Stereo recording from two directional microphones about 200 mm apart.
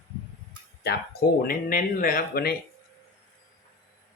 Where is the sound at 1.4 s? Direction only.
45° left (ahead or behind).